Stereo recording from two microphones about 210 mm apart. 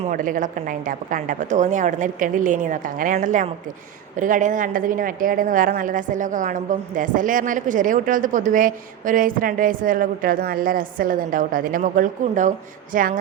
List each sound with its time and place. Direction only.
0.0 s a woman's voice: 40° right (ahead or behind)